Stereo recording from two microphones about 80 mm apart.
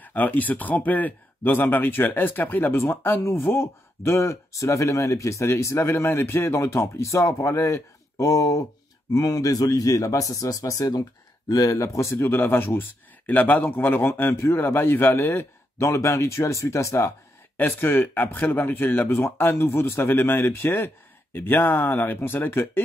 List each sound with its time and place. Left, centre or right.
0.0 s speech: left
17.6 s speech: left